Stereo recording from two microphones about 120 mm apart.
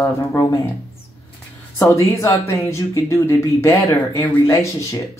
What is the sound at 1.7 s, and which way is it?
Speech, 25° left (ahead or behind).